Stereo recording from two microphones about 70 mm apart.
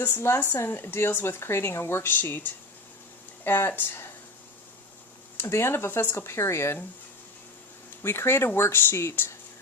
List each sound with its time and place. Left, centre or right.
0.1 s speech: left
3.4 s speech: left
5.4 s speech: left
8.0 s speech: left